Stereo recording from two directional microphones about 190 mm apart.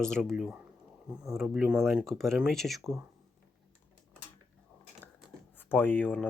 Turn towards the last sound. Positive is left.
turn(degrees=10)  # may be behind; listen again after turning